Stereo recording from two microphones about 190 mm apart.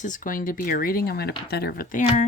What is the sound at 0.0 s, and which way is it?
Speech, 45° left (ahead or behind).